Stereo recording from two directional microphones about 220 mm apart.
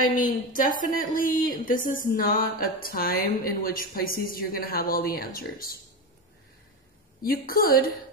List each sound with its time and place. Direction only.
0.0 s speech: 40° left (ahead or behind)
7.2 s speech: 40° left (ahead or behind)